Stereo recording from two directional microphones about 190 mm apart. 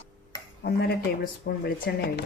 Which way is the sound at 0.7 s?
60° left (ahead or behind).